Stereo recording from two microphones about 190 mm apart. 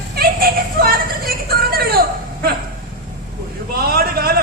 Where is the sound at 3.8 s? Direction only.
50° right (ahead or behind).